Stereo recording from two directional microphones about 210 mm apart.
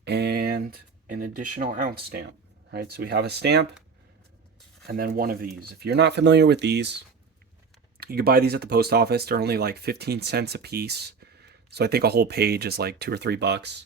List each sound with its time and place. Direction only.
0.0 s a sound: 50° right (ahead or behind)
1.5 s speech: 40° right (ahead or behind)
4.9 s speech: 45° right (ahead or behind)